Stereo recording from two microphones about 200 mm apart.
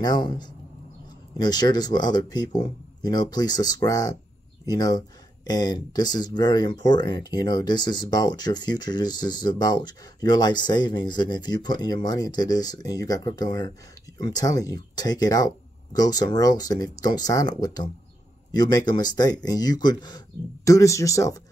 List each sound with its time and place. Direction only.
0.0 s speech: 20° left (ahead or behind)